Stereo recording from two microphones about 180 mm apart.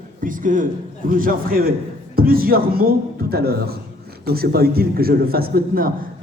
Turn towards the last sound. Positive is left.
turn(degrees=-55)  # may be behind; listen again after turning